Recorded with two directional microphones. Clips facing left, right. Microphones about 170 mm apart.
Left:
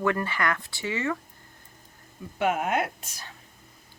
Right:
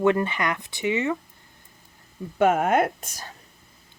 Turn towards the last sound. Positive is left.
turn(degrees=-45)  # may be behind; listen again after turning